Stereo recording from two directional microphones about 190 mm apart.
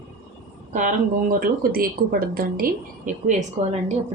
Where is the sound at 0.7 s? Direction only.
40° right (ahead or behind).